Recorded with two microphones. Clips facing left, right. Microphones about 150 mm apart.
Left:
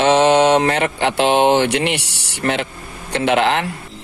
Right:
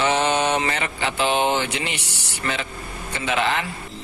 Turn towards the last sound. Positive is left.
turn(degrees=70)  # may be behind; listen again after turning